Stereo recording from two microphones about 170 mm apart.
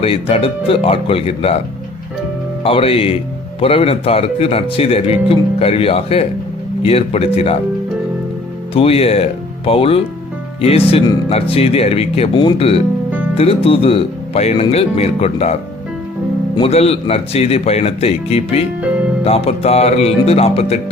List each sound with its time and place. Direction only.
0.0 s speech: 35° left (ahead or behind)
2.6 s speech: 35° left (ahead or behind)
8.7 s speech: 35° left (ahead or behind)
16.6 s speech: 35° left (ahead or behind)